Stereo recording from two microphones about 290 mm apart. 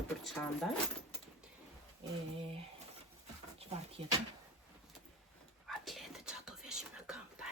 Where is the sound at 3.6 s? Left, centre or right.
Right.